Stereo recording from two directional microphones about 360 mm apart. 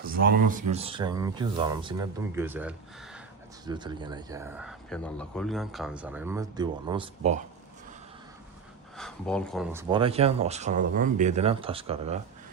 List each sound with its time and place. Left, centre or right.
0.0 s speech: right
9.0 s speech: centre
9.9 s speech: centre